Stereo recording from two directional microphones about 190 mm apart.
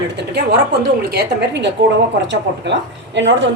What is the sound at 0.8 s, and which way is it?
Speech, 60° right (ahead or behind).